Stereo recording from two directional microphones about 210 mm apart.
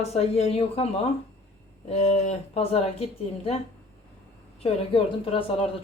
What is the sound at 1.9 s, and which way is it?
Speech, 30° left (ahead or behind).